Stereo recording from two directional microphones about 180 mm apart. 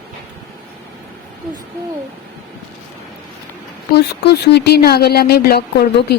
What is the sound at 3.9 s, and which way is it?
Speech, 65° left (ahead or behind).